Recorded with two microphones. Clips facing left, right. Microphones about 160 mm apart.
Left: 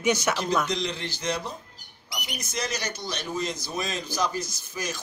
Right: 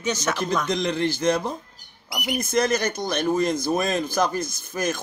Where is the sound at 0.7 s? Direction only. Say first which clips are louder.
Right 7 dB; 50° right (ahead or behind).